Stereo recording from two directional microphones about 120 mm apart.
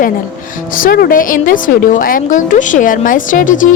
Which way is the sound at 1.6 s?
90° left.